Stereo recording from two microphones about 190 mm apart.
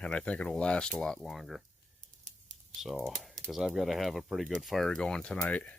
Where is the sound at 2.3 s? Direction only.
40° right (ahead or behind).